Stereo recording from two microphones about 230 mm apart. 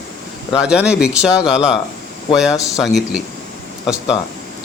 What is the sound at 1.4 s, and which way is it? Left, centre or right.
Speech, centre.